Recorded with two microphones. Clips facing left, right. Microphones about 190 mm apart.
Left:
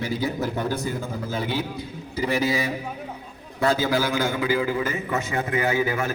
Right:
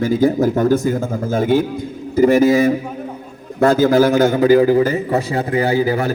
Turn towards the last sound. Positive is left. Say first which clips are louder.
# right 7 dB
turn(degrees=-35)  # may be behind; listen again after turning